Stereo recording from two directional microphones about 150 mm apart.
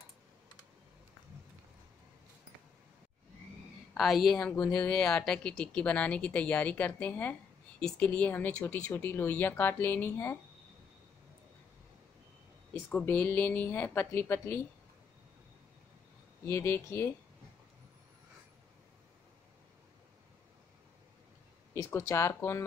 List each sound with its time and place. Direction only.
3.9 s speech: centre (ahead or behind)
12.9 s speech: 10° left (ahead or behind)
16.4 s speech: 15° left (ahead or behind)
21.7 s speech: 20° left (ahead or behind)